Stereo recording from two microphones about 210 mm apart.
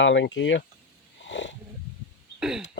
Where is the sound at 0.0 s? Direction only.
60° left (ahead or behind).